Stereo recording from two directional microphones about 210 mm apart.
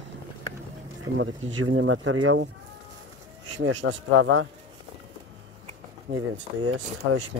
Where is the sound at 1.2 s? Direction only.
65° right (ahead or behind); by 2.4 s 90° right.